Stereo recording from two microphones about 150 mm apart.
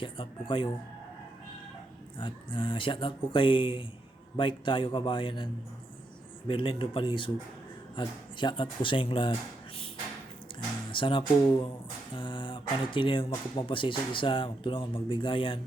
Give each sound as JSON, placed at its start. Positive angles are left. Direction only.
{"t": 0.0, "sound": "speech", "side_deg": 35}
{"t": 2.1, "sound": "speech", "side_deg": 35}
{"t": 6.5, "sound": "speech", "side_deg": 35}
{"t": 10.9, "sound": "speech", "side_deg": 35}